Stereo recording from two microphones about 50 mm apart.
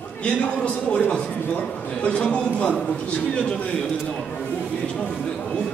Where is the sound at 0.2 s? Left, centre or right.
Left.